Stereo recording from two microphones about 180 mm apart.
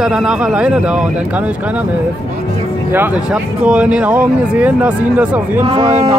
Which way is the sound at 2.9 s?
10° right (ahead or behind).